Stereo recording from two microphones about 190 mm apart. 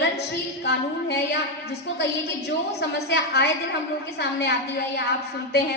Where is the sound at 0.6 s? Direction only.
60° left (ahead or behind).